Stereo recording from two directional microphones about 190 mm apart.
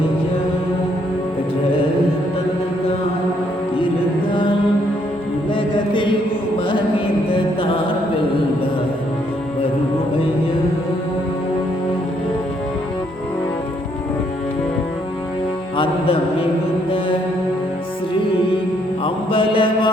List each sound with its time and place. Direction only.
4.3 s music: 25° left (ahead or behind)
5.5 s music: 25° left (ahead or behind)
7.3 s music: 30° left (ahead or behind)
15.8 s music: 30° left (ahead or behind)
19.0 s mantra: 25° left (ahead or behind)